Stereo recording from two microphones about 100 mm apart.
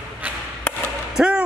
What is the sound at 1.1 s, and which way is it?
Speech, 10° right (ahead or behind).